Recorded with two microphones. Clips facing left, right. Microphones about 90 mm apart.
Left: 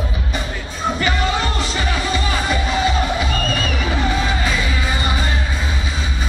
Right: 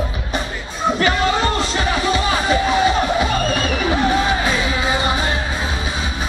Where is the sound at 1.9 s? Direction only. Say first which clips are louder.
Right 4 dB; 20° right (ahead or behind).